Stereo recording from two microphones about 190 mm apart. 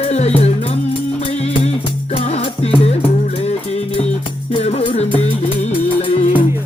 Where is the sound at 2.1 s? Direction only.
30° left (ahead or behind).